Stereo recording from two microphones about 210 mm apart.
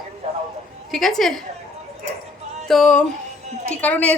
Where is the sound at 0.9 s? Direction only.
Centre (ahead or behind).